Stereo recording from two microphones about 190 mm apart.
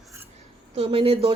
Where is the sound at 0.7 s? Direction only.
30° right (ahead or behind).